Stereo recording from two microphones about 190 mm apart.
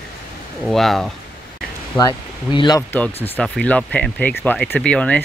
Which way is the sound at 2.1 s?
25° left (ahead or behind).